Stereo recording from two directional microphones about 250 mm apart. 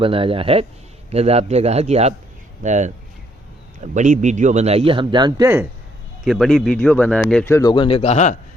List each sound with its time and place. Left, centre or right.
0.0 s a man's voice: right
3.9 s a man's voice: right; by 5.6 s centre
6.2 s speech: centre; by 8.4 s left